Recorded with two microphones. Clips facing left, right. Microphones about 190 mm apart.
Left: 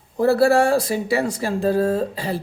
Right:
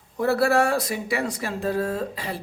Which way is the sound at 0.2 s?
30° left (ahead or behind).